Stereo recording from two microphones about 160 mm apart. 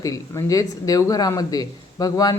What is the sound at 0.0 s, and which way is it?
A man's voice, 20° left (ahead or behind).